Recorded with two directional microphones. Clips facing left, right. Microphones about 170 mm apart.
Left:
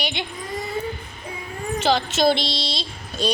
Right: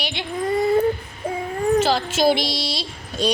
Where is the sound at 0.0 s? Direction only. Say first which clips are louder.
Left 1 dB; 5° right (ahead or behind).